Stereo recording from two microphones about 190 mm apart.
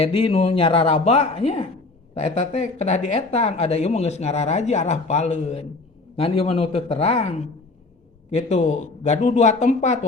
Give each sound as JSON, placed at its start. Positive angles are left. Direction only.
{"t": 0.0, "sound": "a woman's voice", "side_deg": 30}